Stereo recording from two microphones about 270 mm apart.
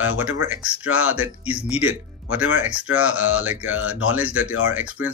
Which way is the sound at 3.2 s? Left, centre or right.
Left.